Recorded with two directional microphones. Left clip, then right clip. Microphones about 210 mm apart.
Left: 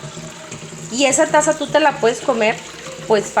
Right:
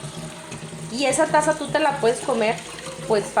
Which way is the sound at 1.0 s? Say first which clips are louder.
Left 5 dB; 30° left (ahead or behind).